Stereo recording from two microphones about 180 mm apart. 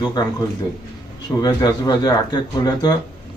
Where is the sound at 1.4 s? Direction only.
20° left (ahead or behind).